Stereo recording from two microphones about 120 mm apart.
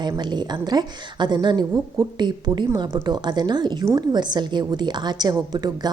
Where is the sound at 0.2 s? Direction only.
35° right (ahead or behind).